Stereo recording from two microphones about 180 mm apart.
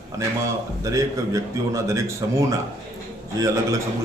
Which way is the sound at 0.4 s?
15° right (ahead or behind).